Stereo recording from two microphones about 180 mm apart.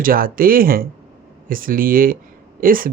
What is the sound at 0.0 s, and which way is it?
Speech, 50° right (ahead or behind).